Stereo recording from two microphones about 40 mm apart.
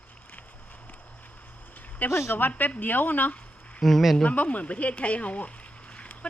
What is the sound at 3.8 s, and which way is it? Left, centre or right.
Speech, centre.